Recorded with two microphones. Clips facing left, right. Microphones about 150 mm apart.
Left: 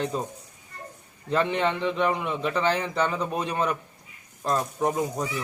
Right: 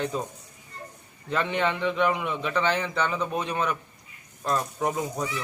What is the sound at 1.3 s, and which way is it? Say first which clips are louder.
Speech: left 2 dB; 35° left (ahead or behind).